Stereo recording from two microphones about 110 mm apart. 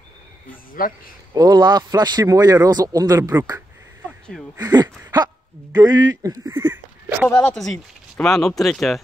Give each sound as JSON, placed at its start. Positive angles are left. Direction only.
{"t": 1.3, "sound": "speech", "side_deg": -40}
{"t": 4.6, "sound": "speech", "side_deg": -40}
{"t": 7.2, "sound": "speech", "side_deg": 15}
{"t": 7.5, "sound": "speech", "side_deg": 0}